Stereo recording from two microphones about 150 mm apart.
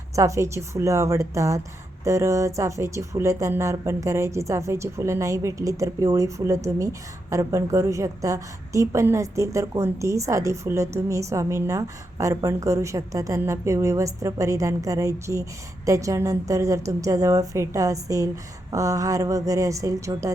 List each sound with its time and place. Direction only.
0.2 s a woman's voice: 20° right (ahead or behind)